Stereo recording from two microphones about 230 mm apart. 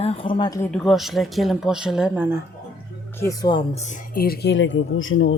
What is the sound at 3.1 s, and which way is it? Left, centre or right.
Speech, centre.